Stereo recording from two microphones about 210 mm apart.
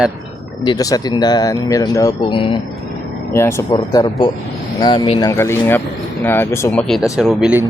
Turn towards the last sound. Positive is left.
turn(degrees=0)  # may be behind; listen again after turning